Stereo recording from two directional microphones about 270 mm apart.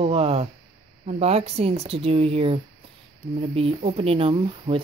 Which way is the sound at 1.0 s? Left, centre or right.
Right.